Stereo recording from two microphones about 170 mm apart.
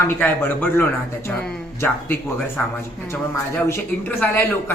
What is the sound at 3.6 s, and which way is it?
Speech, 10° left (ahead or behind).